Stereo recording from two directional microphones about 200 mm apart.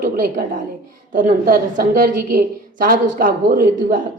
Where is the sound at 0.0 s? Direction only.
45° right (ahead or behind).